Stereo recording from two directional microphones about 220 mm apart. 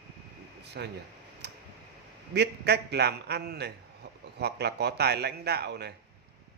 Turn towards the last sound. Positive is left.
turn(degrees=-50)  # may be behind; listen again after turning